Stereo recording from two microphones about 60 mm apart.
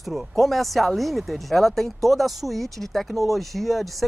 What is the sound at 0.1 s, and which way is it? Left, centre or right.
Speech, centre.